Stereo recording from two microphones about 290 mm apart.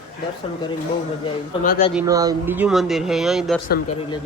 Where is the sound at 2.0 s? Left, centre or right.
Centre.